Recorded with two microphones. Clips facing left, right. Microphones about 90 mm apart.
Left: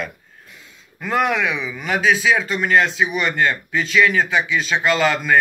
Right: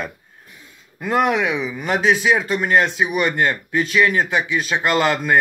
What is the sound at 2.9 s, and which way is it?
Speech, 50° right (ahead or behind).